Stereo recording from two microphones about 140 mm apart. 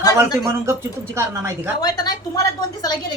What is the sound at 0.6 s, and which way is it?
Speech, 20° right (ahead or behind).